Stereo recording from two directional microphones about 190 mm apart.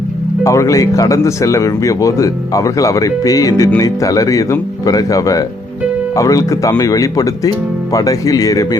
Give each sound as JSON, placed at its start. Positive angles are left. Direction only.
{"t": 0.4, "sound": "speech", "side_deg": 15}